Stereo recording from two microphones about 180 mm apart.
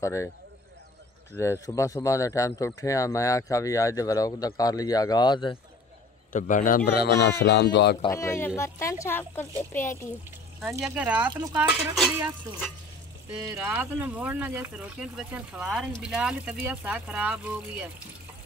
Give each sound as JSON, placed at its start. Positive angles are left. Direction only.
{"t": 0.0, "sound": "speech", "side_deg": 15}
{"t": 1.3, "sound": "speech", "side_deg": 15}
{"t": 6.3, "sound": "speech", "side_deg": 45}
{"t": 8.1, "sound": "speech", "side_deg": 15}
{"t": 10.6, "sound": "speech", "side_deg": -10}
{"t": 13.3, "sound": "speech", "side_deg": -5}